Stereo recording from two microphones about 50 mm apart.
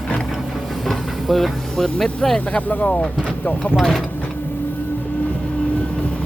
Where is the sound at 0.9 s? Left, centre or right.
Centre.